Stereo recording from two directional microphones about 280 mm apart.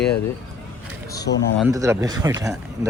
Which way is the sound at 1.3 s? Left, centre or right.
Left.